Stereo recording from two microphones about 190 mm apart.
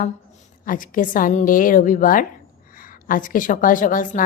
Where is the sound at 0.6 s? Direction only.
45° left (ahead or behind).